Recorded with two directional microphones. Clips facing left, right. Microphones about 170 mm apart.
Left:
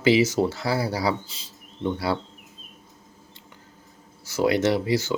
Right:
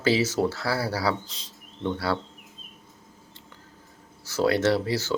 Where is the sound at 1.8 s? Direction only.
15° left (ahead or behind).